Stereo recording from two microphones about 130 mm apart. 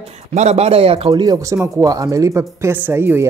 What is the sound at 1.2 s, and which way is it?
A woman's voice, 25° right (ahead or behind).